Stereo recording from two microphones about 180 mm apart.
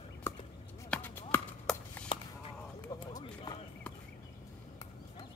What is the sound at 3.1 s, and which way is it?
Run, 20° left (ahead or behind).